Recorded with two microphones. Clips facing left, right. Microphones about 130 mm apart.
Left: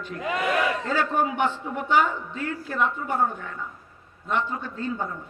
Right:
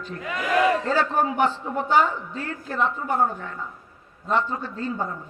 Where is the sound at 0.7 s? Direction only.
35° right (ahead or behind).